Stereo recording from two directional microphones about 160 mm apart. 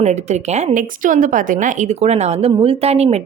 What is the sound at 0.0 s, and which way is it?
A woman's voice, 45° right (ahead or behind).